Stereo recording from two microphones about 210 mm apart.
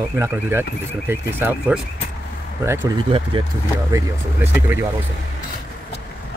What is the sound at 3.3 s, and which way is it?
Speech, 25° right (ahead or behind).